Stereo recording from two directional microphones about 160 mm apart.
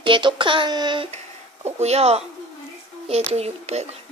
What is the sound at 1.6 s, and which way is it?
A child's voice, 40° right (ahead or behind).